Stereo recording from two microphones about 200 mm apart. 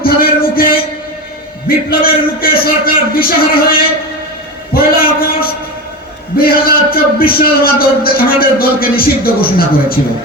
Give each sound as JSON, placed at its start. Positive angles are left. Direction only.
{"t": 0.0, "sound": "music", "side_deg": 45}
{"t": 1.6, "sound": "a man's voice", "side_deg": 50}
{"t": 4.7, "sound": "a sound", "side_deg": 45}
{"t": 6.3, "sound": "a man's voice", "side_deg": 50}